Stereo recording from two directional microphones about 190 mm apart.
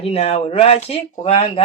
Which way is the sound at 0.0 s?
35° left (ahead or behind).